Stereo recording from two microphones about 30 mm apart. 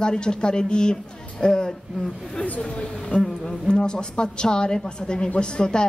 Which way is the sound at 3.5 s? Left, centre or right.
Left.